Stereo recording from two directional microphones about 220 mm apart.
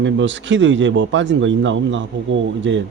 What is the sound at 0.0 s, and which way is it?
Speech, 55° right (ahead or behind).